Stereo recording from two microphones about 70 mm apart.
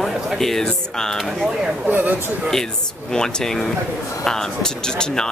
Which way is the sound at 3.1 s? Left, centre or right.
Centre.